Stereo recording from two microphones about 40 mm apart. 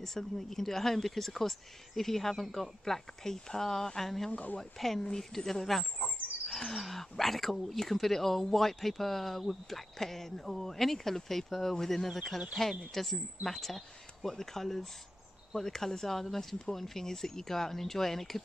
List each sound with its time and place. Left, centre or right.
0.0 s speech: centre
4.3 s speech: left
4.6 s speech: centre